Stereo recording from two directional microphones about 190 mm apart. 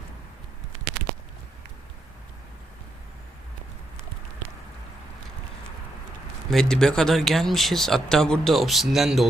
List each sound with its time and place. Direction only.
6.5 s speech: 5° left (ahead or behind)